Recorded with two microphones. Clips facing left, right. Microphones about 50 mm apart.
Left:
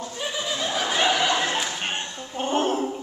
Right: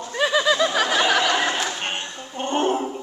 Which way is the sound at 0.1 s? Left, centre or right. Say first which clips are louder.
Right 12 dB; right.